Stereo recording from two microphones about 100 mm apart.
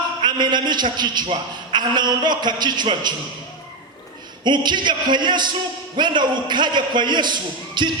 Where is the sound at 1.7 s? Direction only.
45° right (ahead or behind).